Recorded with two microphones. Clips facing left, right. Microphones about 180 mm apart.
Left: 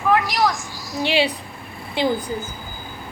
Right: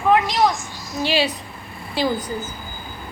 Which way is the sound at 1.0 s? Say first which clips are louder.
Left 1 dB; 25° left (ahead or behind).